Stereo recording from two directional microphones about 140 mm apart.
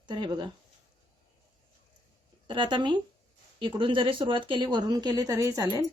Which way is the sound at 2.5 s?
35° right (ahead or behind).